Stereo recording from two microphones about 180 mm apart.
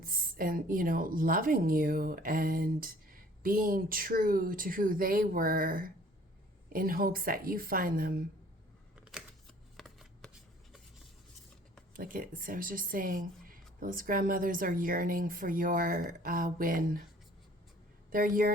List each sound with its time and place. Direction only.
0.0 s a woman's voice: 50° right (ahead or behind)
9.7 s shuffling cards: centre (ahead or behind)
11.9 s a woman's voice: 50° right (ahead or behind)
18.1 s a woman's voice: 50° right (ahead or behind)